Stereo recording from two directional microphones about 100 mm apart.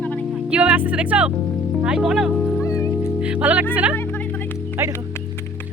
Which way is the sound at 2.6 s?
30° left (ahead or behind).